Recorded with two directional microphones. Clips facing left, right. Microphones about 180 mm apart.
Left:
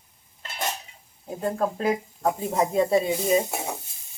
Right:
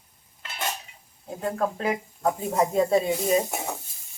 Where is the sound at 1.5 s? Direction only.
15° left (ahead or behind).